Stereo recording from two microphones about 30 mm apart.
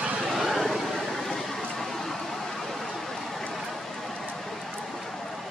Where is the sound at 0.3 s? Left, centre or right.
Centre.